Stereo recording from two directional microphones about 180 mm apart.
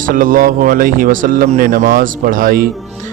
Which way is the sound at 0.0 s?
50° right (ahead or behind).